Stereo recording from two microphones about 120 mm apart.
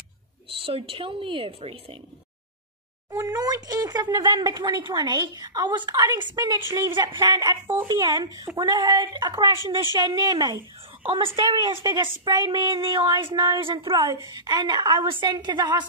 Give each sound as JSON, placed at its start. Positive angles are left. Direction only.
{"t": 0.6, "sound": "a woman's voice", "side_deg": -50}
{"t": 3.1, "sound": "speech", "side_deg": -30}
{"t": 7.6, "sound": "speech", "side_deg": -20}
{"t": 7.9, "sound": "speech", "side_deg": -35}
{"t": 11.1, "sound": "a woman's voice", "side_deg": -45}
{"t": 14.2, "sound": "speech", "side_deg": -35}